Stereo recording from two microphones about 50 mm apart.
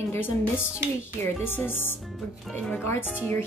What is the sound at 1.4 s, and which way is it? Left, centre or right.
Speech, left.